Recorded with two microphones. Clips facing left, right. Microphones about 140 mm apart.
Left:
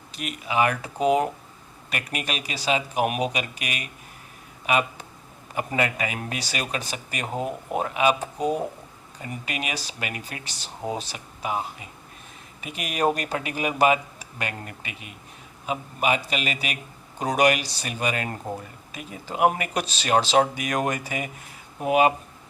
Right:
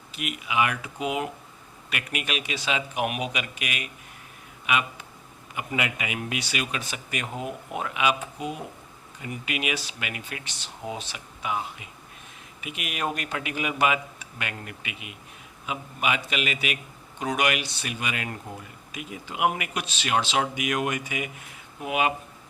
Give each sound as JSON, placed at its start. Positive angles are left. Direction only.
{"t": 0.1, "sound": "speech", "side_deg": 40}